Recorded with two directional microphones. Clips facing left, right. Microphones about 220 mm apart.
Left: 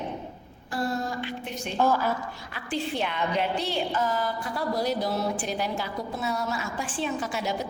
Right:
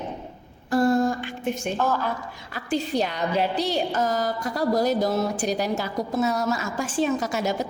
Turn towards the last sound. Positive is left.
turn(degrees=-45)  # may be behind; listen again after turning